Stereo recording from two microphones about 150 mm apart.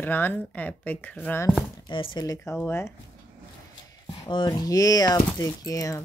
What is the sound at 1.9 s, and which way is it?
Speech, 35° left (ahead or behind).